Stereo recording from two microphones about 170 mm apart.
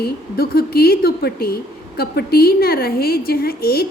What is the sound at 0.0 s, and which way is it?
A woman's voice, 65° left (ahead or behind).